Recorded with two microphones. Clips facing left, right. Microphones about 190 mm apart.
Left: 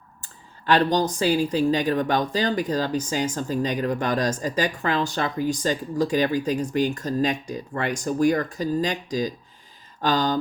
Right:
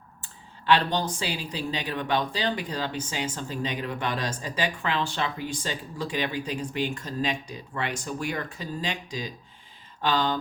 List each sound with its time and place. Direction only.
0.2 s speech: 40° left (ahead or behind)